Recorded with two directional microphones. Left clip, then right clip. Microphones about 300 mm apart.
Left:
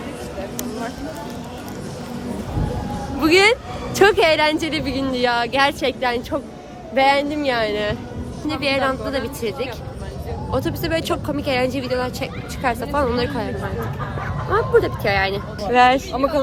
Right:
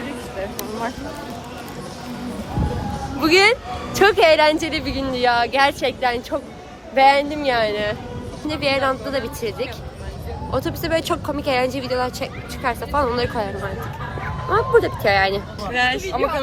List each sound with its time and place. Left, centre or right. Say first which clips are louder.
3.2 s a woman's voice: even; centre
14.5 s speech: right 1 dB; centre
16.0 s speech: left 1 dB; right